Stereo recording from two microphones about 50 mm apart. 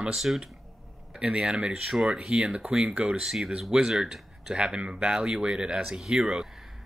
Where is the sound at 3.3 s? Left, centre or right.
Centre.